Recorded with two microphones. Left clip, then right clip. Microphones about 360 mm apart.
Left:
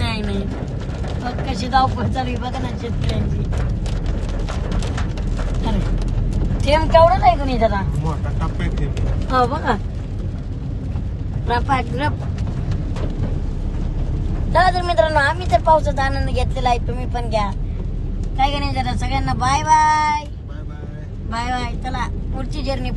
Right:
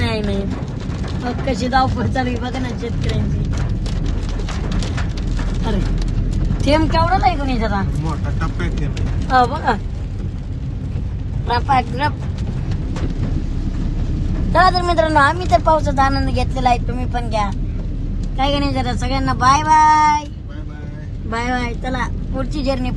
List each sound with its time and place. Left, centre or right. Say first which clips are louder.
0.0 s a sound: right 4 dB; centre
1.5 s a woman's voice: right 1 dB; centre
6.6 s a woman's voice: left 4 dB; centre
11.5 s speech: right 3 dB; centre
14.5 s a woman's voice: right 2 dB; centre
21.2 s a woman's voice: right 2 dB; centre